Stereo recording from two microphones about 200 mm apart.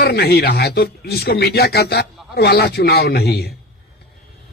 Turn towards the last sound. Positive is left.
turn(degrees=55)  # may be behind; listen again after turning